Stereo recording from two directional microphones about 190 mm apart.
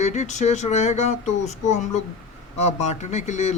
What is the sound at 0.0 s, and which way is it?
Speech, 35° left (ahead or behind).